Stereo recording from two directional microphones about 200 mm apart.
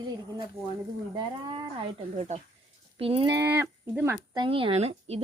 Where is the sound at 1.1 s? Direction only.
25° right (ahead or behind).